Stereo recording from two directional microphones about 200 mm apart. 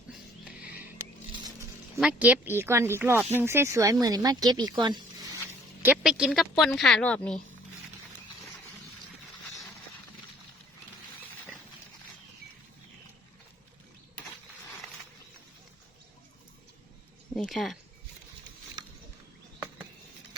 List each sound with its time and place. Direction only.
0.1 s a sound: 5° right (ahead or behind)
2.0 s a woman's voice: 5° right (ahead or behind); by 5.0 s 20° right (ahead or behind)
5.8 s speech: 5° right (ahead or behind)
17.3 s speech: centre (ahead or behind)